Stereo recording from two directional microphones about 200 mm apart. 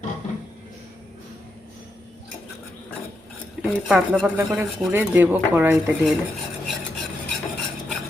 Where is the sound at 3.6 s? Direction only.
Centre (ahead or behind).